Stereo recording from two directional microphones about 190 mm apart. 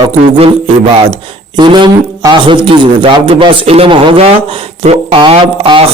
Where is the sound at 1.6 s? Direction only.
25° right (ahead or behind).